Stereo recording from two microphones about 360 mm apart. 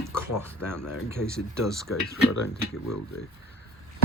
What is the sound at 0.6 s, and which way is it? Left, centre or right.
Speech, centre.